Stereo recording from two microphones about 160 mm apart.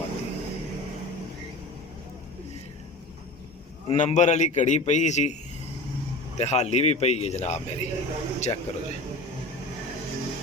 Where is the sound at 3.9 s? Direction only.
45° left (ahead or behind).